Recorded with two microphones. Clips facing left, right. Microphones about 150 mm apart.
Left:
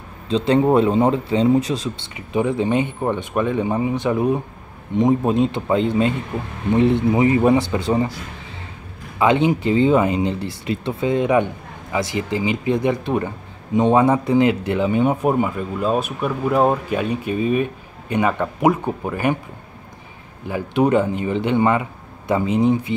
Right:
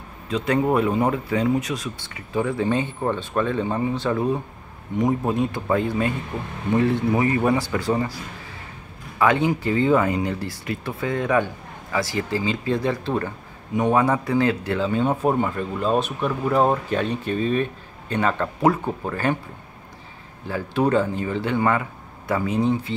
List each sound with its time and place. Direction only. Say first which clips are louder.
0.3 s speech: left 5 dB; 25° left (ahead or behind)
9.2 s speech: left 3 dB; 20° left (ahead or behind)
20.4 s speech: left 3 dB; 20° left (ahead or behind)